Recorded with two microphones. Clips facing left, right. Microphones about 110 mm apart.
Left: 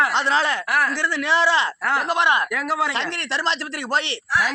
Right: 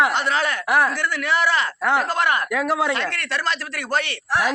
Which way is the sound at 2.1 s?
25° left (ahead or behind).